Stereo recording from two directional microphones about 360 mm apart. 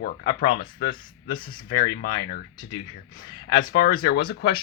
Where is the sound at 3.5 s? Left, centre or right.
Left.